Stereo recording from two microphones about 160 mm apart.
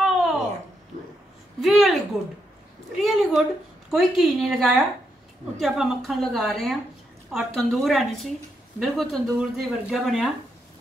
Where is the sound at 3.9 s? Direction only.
Centre (ahead or behind).